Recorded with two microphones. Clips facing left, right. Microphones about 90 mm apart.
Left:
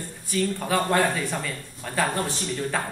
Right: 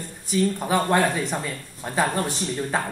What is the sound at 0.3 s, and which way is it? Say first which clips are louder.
A woman's voice: right 3 dB; 20° right (ahead or behind).